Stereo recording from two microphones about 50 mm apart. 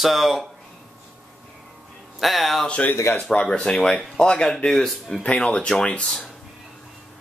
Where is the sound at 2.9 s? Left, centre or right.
Left.